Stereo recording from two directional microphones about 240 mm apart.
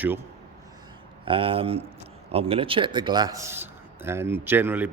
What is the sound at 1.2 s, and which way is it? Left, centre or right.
A man's voice, right.